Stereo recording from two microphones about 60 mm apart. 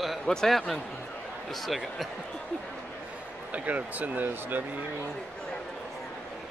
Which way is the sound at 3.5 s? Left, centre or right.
Right.